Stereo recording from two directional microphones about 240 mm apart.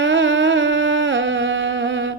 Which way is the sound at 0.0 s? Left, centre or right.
Right.